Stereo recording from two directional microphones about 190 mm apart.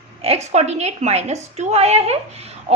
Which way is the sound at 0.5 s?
35° right (ahead or behind).